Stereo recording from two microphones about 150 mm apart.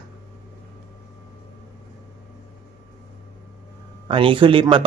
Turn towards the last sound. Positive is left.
turn(degrees=-35)  # may be behind; listen again after turning